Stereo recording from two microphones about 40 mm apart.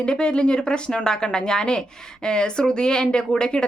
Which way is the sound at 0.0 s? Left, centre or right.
Left.